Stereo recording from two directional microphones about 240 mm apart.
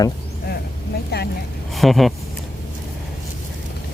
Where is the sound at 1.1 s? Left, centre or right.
Left.